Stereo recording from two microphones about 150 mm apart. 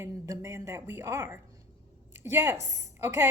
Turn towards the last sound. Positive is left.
turn(degrees=-20)  # may be behind; listen again after turning